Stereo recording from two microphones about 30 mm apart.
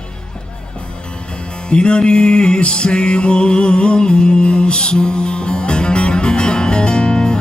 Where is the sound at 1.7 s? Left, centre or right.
Left.